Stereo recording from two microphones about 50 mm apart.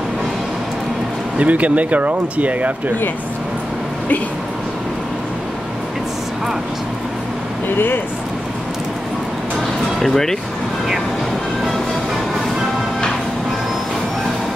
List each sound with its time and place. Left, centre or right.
1.4 s speech: right
7.7 s speech: left
9.9 s speech: centre